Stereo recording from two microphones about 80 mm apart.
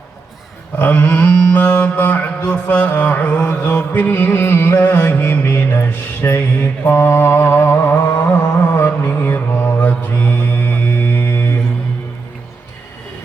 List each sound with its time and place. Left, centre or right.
0.8 s mantra: left